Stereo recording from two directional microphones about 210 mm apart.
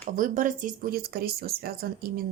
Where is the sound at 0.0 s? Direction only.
40° right (ahead or behind).